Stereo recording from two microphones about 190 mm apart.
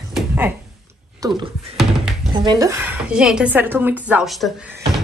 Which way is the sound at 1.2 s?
20° right (ahead or behind).